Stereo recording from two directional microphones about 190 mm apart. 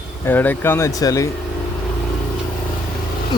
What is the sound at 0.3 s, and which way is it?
Speech, 10° left (ahead or behind).